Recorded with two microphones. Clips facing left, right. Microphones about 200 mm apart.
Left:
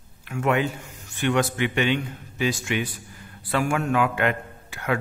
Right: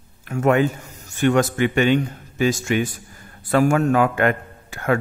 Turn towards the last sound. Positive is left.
turn(degrees=-45)  # may be behind; listen again after turning